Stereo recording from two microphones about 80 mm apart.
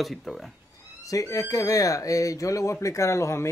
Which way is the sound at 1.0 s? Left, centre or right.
Left.